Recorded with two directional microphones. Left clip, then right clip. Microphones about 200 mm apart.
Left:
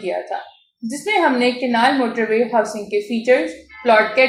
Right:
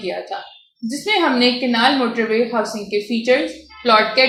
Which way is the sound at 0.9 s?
30° right (ahead or behind).